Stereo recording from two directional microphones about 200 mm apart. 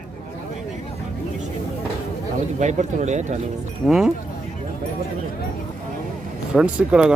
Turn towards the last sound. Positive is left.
turn(degrees=-5)  # may be behind; listen again after turning